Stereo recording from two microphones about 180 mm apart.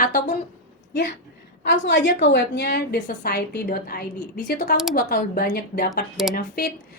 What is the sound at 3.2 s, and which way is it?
A woman's voice, 60° left (ahead or behind).